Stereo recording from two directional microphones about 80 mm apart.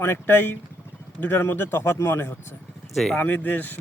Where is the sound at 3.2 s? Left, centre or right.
Left.